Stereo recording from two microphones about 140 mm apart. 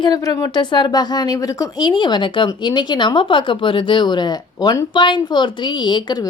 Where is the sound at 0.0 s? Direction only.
25° left (ahead or behind).